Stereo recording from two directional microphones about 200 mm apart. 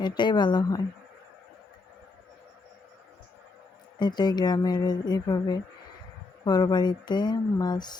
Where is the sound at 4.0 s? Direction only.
20° left (ahead or behind).